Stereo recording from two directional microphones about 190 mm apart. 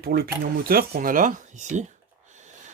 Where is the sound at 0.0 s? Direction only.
50° right (ahead or behind).